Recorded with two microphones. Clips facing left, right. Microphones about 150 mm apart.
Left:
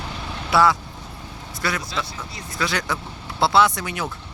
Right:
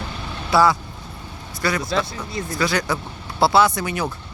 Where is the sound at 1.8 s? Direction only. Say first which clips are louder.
Right 6 dB; 50° right (ahead or behind).